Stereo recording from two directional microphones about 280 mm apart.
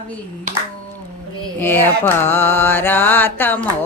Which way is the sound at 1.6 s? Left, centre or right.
Centre.